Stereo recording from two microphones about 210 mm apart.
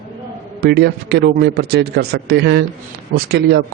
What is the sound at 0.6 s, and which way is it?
A man's voice, 50° right (ahead or behind).